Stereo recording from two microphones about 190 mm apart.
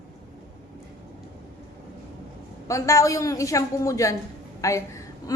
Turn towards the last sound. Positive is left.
turn(degrees=15)  # may be behind; listen again after turning